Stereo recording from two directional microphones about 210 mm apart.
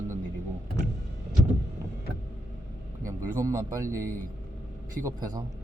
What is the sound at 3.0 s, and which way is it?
Speech, 15° right (ahead or behind).